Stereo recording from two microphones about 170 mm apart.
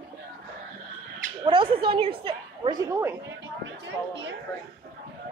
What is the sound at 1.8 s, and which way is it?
A woman's voice, 30° right (ahead or behind).